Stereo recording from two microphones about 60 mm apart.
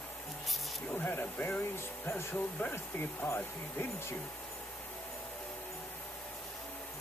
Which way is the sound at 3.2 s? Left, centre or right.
Left.